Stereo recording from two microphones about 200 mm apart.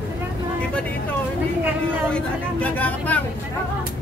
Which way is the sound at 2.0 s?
5° left (ahead or behind).